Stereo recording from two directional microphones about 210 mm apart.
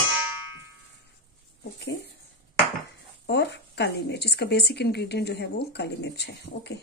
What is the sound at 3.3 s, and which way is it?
A woman's voice, 55° left (ahead or behind).